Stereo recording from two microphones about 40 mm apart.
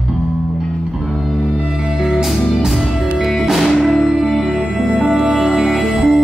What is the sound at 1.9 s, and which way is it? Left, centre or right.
Music, centre.